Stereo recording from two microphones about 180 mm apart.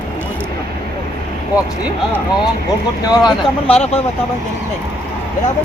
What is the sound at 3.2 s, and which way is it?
Speech, 30° left (ahead or behind).